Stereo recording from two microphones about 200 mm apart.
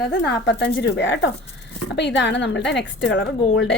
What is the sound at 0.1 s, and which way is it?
A woman's voice, 60° left (ahead or behind).